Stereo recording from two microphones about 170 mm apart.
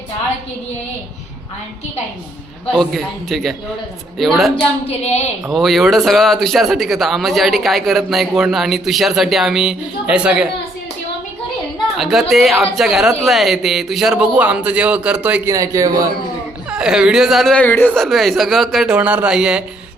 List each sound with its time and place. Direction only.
2.7 s a man's voice: centre (ahead or behind)
4.9 s a woman's voice: 40° left (ahead or behind)
5.5 s a man's voice: centre (ahead or behind)
11.9 s a woman's voice: centre (ahead or behind)
15.5 s a man's voice: 20° right (ahead or behind)
16.6 s a man's voice: 5° right (ahead or behind)